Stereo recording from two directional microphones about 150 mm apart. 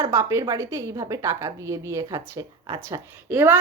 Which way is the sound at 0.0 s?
20° right (ahead or behind).